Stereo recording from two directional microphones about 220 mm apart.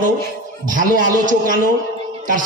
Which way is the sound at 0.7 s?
35° right (ahead or behind).